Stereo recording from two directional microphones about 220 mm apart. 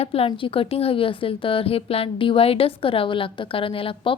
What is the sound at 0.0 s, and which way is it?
Speech, 25° left (ahead or behind).